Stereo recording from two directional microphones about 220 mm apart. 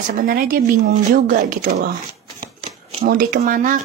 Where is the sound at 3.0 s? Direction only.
40° right (ahead or behind).